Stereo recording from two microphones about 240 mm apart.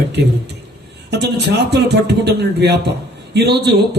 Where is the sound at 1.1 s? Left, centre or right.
Right.